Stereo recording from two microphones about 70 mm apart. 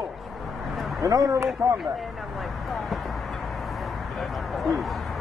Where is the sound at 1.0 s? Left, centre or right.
Right.